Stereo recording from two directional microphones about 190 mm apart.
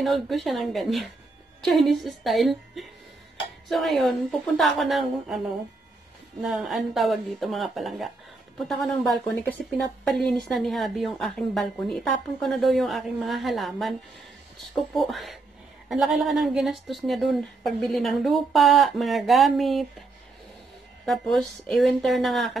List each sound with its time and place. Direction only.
0.0 s speech: centre (ahead or behind)
6.4 s speech: centre (ahead or behind)
21.0 s speech: centre (ahead or behind)